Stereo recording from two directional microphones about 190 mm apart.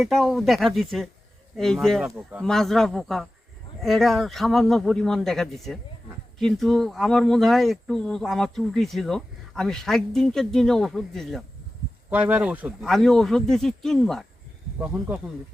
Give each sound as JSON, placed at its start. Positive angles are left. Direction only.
{"t": 0.0, "sound": "speech", "side_deg": 0}